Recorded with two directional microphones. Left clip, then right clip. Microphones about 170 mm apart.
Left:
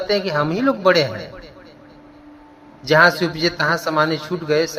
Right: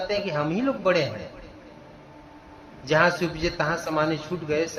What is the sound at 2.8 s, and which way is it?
Speech, 30° left (ahead or behind).